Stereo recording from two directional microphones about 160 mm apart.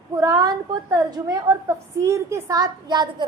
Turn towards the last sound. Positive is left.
turn(degrees=-25)  # may be behind; listen again after turning